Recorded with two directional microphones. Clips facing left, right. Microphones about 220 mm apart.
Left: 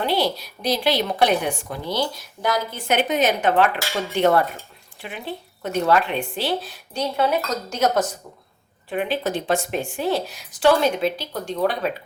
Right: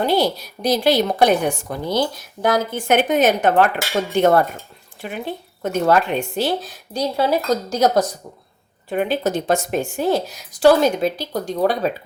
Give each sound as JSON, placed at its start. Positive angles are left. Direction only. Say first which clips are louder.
{"t": 0.0, "sound": "a woman's voice", "louder": "right 4 dB", "side_deg": -45}